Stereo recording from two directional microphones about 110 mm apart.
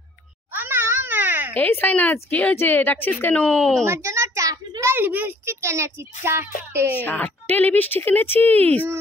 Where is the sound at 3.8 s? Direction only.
25° right (ahead or behind).